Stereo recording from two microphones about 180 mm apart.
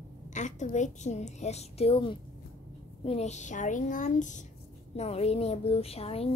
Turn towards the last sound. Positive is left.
turn(degrees=35)  # may be behind; listen again after turning